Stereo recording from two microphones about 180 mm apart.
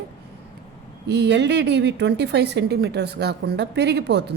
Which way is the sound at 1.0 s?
70° right (ahead or behind).